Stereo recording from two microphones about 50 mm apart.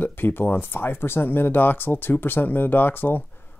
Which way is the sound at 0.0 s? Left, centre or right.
Left.